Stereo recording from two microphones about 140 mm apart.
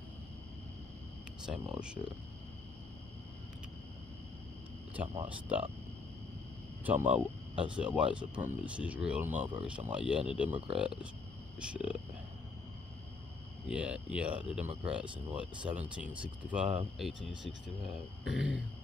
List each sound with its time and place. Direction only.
1.4 s speech: 5° right (ahead or behind)
5.0 s speech: 40° right (ahead or behind)
5.3 s speech: 10° right (ahead or behind)
6.8 s speech: 10° right (ahead or behind)
13.7 s speech: 10° right (ahead or behind)